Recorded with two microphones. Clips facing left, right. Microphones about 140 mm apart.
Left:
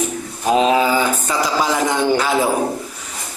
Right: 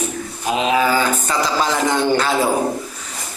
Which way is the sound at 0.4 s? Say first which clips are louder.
Left 4 dB; 35° left (ahead or behind).